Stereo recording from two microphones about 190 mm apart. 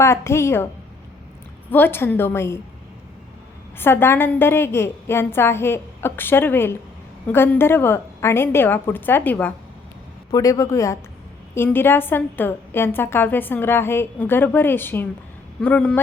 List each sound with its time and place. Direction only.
0.0 s a woman's voice: 15° left (ahead or behind)
1.7 s a woman's voice: 10° left (ahead or behind)
3.8 s a woman's voice: 10° left (ahead or behind)